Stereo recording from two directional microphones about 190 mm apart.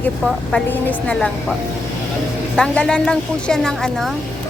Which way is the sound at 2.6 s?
5° left (ahead or behind).